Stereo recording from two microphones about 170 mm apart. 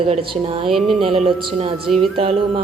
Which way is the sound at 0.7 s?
Centre (ahead or behind).